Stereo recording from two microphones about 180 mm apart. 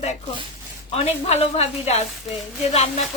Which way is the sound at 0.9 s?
35° left (ahead or behind).